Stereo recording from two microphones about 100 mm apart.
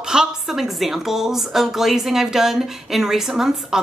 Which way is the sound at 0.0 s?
5° right (ahead or behind).